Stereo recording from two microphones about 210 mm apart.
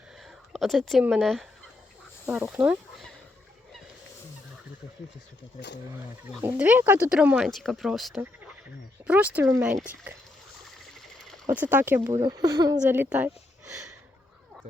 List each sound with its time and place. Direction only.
0.2 s speech: centre (ahead or behind)
5.5 s speech: 55° left (ahead or behind)
6.4 s speech: 10° right (ahead or behind)
11.6 s speech: 10° right (ahead or behind)
12.2 s speech: 20° right (ahead or behind)